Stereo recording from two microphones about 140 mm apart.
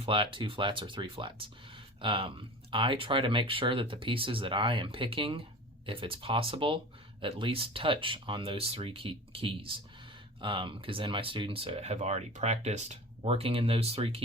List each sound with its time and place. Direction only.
0.0 s speech: 40° right (ahead or behind)